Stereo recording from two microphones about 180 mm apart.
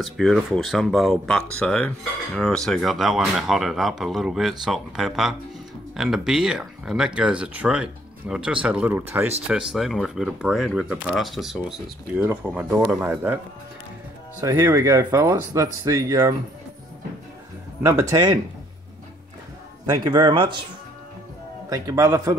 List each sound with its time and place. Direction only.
0.0 s cutlery: centre (ahead or behind)
12.5 s speech: 5° right (ahead or behind)
14.4 s speech: 15° right (ahead or behind)
17.8 s speech: 15° right (ahead or behind)
20.0 s speech: 25° right (ahead or behind)
21.6 s speech: 20° right (ahead or behind)